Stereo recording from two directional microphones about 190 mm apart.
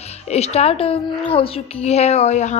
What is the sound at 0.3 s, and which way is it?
A woman's voice, 35° left (ahead or behind).